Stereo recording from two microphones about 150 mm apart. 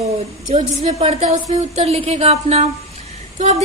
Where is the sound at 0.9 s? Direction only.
50° right (ahead or behind).